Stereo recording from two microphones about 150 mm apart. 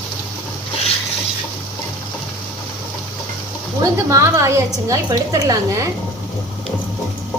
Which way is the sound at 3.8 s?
20° right (ahead or behind).